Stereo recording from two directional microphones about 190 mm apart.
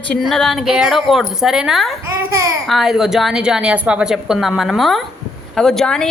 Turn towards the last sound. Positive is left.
turn(degrees=5)  # may be behind; listen again after turning